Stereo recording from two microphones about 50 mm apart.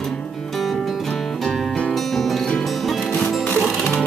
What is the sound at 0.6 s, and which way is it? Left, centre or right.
Music, centre.